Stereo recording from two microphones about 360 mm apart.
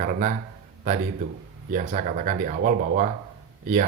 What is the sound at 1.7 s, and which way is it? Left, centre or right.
Speech, right.